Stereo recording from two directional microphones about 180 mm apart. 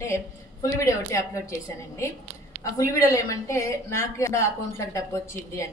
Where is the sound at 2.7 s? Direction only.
15° left (ahead or behind).